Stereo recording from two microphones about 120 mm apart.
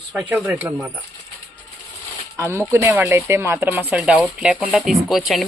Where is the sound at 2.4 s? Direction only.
20° right (ahead or behind).